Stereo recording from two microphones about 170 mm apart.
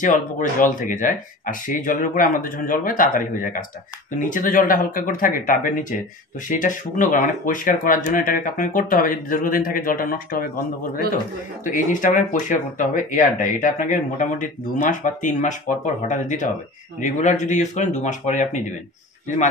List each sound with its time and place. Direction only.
0.0 s speech: 50° left (ahead or behind)
11.6 s speech: 50° left (ahead or behind)